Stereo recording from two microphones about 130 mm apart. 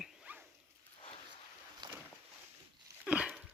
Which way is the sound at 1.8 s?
35° right (ahead or behind).